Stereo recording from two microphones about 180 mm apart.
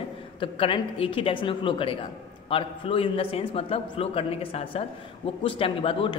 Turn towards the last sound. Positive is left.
turn(degrees=30)  # may be behind; listen again after turning